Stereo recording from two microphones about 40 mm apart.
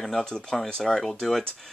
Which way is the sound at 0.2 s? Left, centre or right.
Centre.